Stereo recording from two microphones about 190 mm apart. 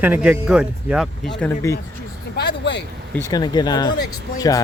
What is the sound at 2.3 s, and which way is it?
Speech, 60° left (ahead or behind).